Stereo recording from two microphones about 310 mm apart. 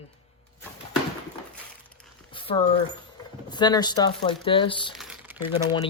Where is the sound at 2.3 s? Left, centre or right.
Centre.